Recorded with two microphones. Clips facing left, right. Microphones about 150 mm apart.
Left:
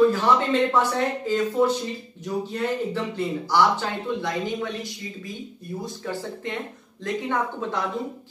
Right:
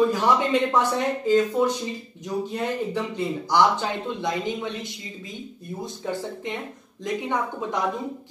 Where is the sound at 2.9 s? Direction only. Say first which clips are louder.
Even; 15° right (ahead or behind).